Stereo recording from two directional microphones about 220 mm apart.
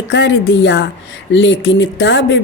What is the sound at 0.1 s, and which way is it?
A woman's voice, 55° left (ahead or behind).